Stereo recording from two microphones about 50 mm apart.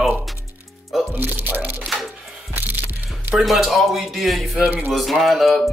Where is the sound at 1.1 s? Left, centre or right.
Right.